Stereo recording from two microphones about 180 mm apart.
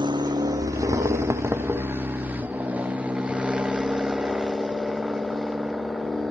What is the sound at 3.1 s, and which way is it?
Vehicle, 5° right (ahead or behind).